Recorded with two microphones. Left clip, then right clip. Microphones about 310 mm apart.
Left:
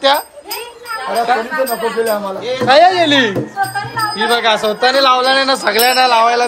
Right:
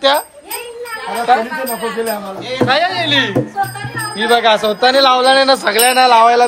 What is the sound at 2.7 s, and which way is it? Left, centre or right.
Speech, left.